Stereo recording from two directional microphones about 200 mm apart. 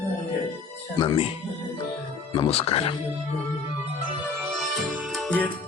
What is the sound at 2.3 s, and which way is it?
Speech, 25° left (ahead or behind).